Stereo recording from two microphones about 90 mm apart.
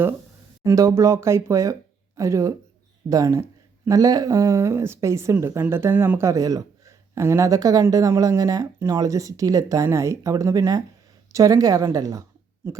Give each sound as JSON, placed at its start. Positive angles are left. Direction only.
{"t": 0.6, "sound": "speech", "side_deg": -40}
{"t": 6.1, "sound": "speech", "side_deg": -40}
{"t": 12.6, "sound": "speech", "side_deg": -25}